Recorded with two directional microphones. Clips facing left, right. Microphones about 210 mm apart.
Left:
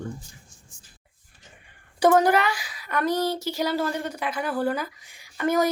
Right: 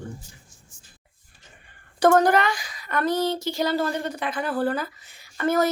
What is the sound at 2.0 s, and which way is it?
A woman's voice, 10° left (ahead or behind).